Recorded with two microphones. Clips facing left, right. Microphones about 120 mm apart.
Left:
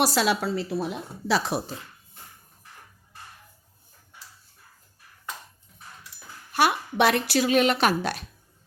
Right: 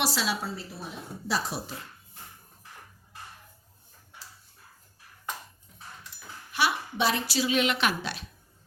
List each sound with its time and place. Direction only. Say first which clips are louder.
0.0 s a woman's voice: left 7 dB; 50° left (ahead or behind)
0.4 s a woman's voice: left 10 dB; 80° left
1.3 s speech: left 6 dB; 65° left (ahead or behind)
6.5 s speech: left 5 dB; 50° left (ahead or behind)